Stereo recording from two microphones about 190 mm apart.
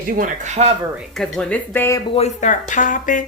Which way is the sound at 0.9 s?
Centre (ahead or behind).